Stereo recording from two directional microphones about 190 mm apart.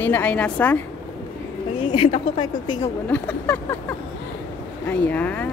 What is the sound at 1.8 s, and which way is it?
Speech, 25° left (ahead or behind).